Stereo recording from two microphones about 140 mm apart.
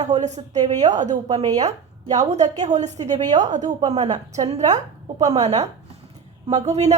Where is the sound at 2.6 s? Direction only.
55° right (ahead or behind).